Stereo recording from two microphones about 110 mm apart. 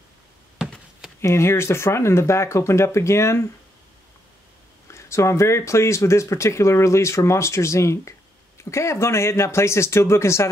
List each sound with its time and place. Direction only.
1.2 s speech: 25° left (ahead or behind)
4.9 s speech: 25° left (ahead or behind)